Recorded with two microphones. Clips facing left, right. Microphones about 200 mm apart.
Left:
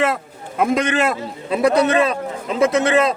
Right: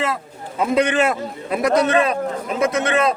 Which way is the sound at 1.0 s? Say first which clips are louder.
Even; 30° left (ahead or behind).